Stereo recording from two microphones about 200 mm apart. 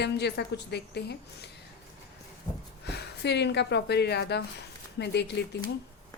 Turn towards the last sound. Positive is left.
turn(degrees=55)  # may be behind; listen again after turning